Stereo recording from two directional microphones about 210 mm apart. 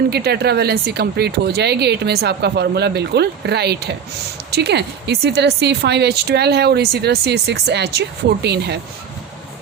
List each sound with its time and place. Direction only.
0.1 s speech: 50° right (ahead or behind)